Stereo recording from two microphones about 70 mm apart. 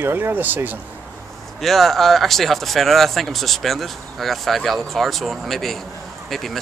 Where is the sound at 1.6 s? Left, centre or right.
Centre.